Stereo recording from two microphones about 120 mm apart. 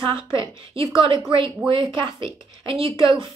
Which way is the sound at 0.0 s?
45° right (ahead or behind).